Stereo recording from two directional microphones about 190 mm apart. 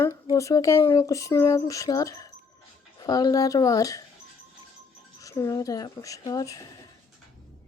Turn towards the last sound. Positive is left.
turn(degrees=20)  # may be behind; listen again after turning